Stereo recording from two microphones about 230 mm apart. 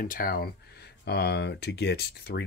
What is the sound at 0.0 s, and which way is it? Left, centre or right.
Speech, left.